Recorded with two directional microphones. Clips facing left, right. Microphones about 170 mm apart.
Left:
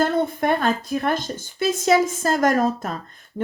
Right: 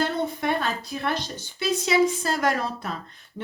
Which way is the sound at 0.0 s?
50° left (ahead or behind).